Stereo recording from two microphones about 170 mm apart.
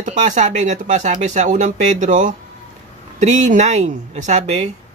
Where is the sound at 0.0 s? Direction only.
45° right (ahead or behind).